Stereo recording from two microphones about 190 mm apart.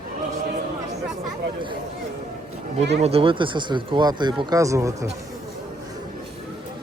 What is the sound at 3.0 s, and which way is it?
Speech, 30° right (ahead or behind).